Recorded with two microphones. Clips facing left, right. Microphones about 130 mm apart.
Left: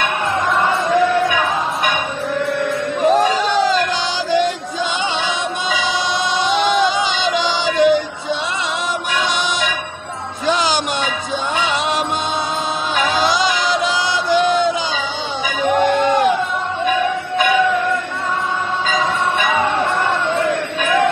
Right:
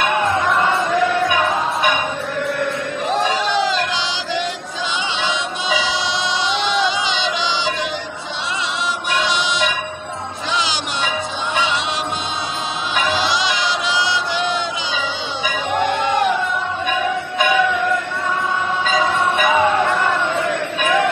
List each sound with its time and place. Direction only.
3.2 s crowd: 45° left (ahead or behind)
5.8 s music: 50° left (ahead or behind)
9.2 s music: 50° left (ahead or behind)
13.2 s chant: 45° left (ahead or behind)